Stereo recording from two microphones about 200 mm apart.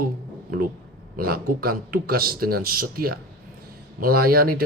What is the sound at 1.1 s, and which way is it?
Speech, 45° right (ahead or behind).